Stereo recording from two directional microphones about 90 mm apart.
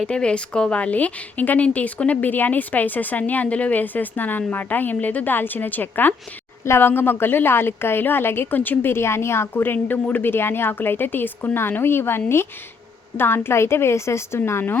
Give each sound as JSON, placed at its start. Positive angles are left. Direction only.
{"t": 0.1, "sound": "a woman's voice", "side_deg": 10}